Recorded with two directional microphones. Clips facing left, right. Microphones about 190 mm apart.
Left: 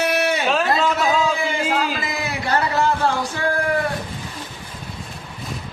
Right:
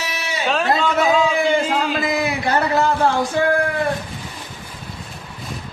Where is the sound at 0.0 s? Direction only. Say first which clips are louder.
Left 9 dB; 55° left (ahead or behind).